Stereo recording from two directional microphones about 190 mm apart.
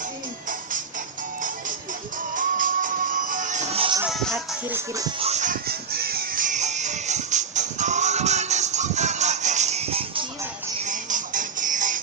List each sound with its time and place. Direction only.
2.3 s music: 45° right (ahead or behind)
4.0 s music: centre (ahead or behind)
5.2 s music: 40° right (ahead or behind)
10.8 s music: 45° right (ahead or behind)